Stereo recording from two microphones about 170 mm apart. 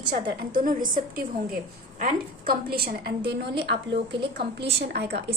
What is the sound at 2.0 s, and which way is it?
A woman's voice, 60° right (ahead or behind).